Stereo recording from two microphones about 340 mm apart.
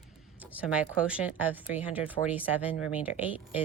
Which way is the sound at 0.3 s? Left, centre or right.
Centre.